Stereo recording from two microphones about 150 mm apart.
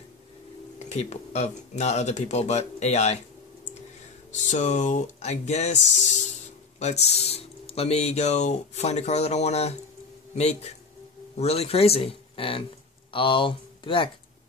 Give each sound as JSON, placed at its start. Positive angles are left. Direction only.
{"t": 0.8, "sound": "speech", "side_deg": 45}
{"t": 4.3, "sound": "speech", "side_deg": 50}
{"t": 6.8, "sound": "speech", "side_deg": 45}